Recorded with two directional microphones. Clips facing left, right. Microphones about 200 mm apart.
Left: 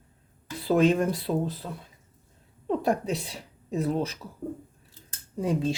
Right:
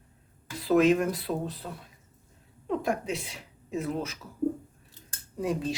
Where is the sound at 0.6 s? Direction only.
30° left (ahead or behind).